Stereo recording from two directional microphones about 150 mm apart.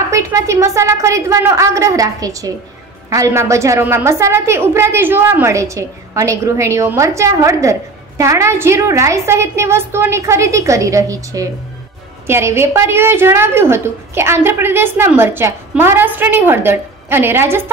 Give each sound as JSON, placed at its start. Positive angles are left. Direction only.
{"t": 0.1, "sound": "a woman's voice", "side_deg": -20}